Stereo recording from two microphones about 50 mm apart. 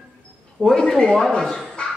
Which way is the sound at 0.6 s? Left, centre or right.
Centre.